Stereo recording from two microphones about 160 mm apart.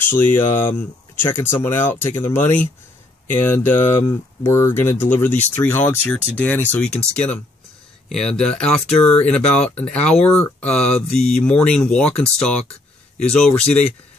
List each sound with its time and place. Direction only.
0.0 s speech: 15° left (ahead or behind)